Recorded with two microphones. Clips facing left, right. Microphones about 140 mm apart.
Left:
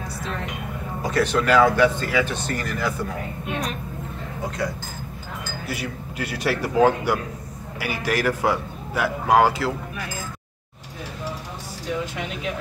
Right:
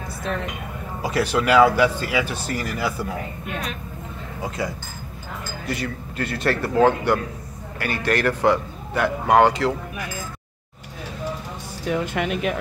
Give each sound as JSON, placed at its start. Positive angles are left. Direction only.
{"t": 1.0, "sound": "speech", "side_deg": -10}
{"t": 4.6, "sound": "speech", "side_deg": 0}
{"t": 5.7, "sound": "a man's voice", "side_deg": 10}
{"t": 11.9, "sound": "speech", "side_deg": -60}